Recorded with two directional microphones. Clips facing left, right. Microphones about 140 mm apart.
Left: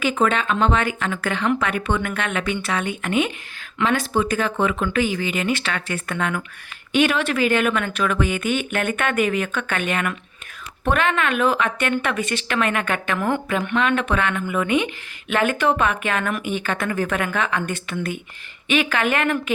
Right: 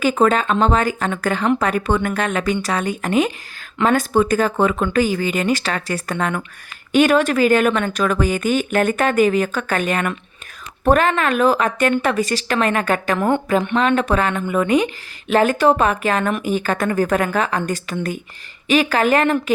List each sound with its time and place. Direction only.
0.0 s a woman's voice: 40° right (ahead or behind)